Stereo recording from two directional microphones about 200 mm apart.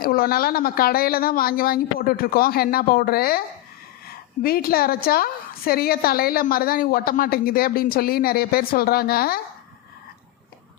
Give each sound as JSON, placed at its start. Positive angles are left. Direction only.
{"t": 0.0, "sound": "a woman's voice", "side_deg": 45}
{"t": 4.4, "sound": "a woman's voice", "side_deg": 50}